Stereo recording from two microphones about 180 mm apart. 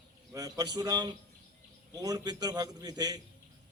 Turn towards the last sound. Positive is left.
turn(degrees=-20)  # may be behind; listen again after turning